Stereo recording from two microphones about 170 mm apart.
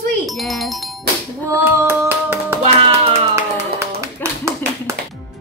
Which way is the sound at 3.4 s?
15° right (ahead or behind).